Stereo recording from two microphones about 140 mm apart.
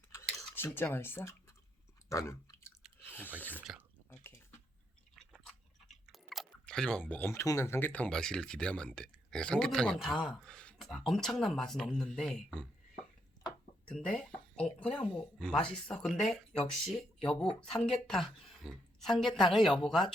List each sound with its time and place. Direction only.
0.3 s speech: 15° left (ahead or behind)
2.0 s chewing: 20° left (ahead or behind)
3.1 s a sound: 15° left (ahead or behind)
3.7 s drip: 5° right (ahead or behind)
5.3 s speech: centre (ahead or behind)
13.8 s speech: 5° left (ahead or behind)